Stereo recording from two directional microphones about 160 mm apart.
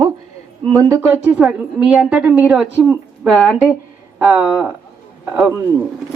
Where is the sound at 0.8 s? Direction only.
20° right (ahead or behind).